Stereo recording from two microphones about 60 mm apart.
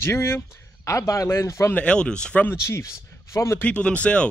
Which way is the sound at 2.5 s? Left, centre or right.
Left.